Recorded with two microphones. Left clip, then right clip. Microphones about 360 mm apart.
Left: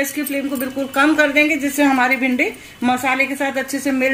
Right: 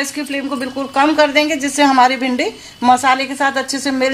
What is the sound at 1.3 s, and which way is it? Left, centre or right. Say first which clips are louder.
A woman's voice: right 1 dB; right.